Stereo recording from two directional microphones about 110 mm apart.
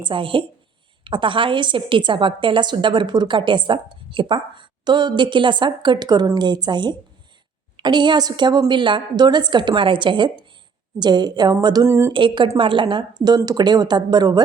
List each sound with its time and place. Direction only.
0.0 s a woman's voice: 50° right (ahead or behind)
11.9 s a woman's voice: 25° right (ahead or behind)
12.1 s a woman's voice: 45° right (ahead or behind)